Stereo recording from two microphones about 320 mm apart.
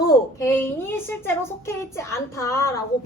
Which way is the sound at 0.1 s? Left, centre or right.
Centre.